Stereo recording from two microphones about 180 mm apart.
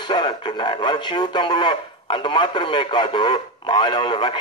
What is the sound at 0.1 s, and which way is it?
Speech, 25° left (ahead or behind).